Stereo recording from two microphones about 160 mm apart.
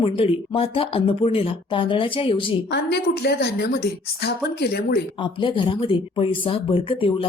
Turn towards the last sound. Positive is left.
turn(degrees=35)  # may be behind; listen again after turning